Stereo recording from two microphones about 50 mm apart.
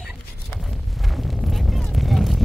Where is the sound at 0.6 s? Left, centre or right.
Centre.